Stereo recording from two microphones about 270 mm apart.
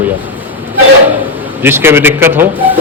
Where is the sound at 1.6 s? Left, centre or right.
Centre.